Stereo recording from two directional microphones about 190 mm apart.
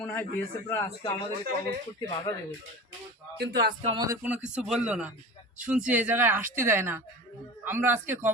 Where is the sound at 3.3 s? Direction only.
60° right (ahead or behind).